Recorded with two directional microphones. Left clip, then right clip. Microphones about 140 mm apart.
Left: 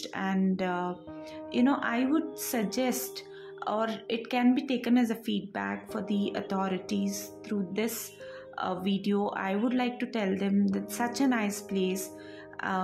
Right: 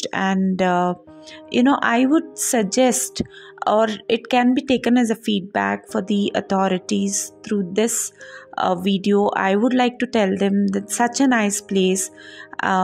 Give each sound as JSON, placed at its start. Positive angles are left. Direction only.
{"t": 0.0, "sound": "a woman's voice", "side_deg": -70}